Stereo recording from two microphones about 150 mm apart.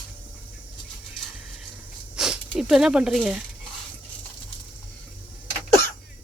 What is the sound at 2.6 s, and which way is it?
Speech, 5° right (ahead or behind).